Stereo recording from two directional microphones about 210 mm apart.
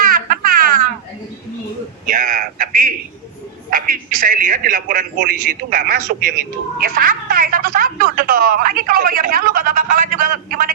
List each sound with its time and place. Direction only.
0.0 s baby laughter: 45° right (ahead or behind)
2.0 s a man's voice: 40° right (ahead or behind)